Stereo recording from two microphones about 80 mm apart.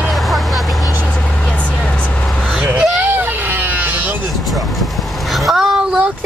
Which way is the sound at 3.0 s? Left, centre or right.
Right.